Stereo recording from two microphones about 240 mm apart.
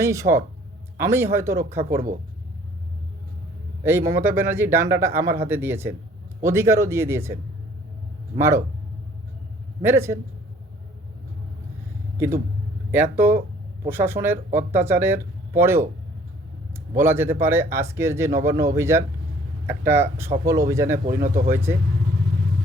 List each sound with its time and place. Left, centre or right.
0.0 s speech: centre
3.8 s speech: centre
8.4 s speech: centre
9.8 s speech: centre
12.9 s speech: centre
16.9 s speech: centre
21.2 s speech: right
21.5 s speech: centre